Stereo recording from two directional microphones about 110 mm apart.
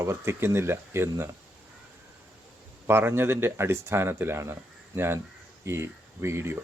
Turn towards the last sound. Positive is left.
turn(degrees=-25)  # may be behind; listen again after turning